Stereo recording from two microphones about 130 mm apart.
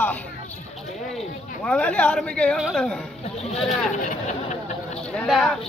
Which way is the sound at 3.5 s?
50° left (ahead or behind).